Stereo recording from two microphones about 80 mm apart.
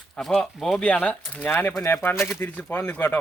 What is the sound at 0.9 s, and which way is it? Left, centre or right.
Speech, centre.